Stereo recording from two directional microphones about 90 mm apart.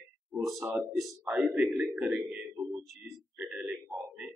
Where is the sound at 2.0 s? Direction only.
5° right (ahead or behind).